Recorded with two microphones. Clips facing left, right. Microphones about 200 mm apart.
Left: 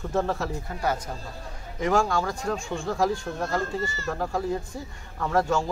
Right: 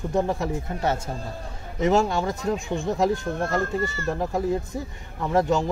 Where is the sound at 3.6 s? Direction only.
55° right (ahead or behind).